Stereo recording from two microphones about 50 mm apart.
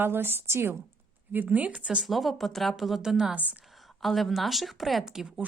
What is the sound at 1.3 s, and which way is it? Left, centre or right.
Speech, right.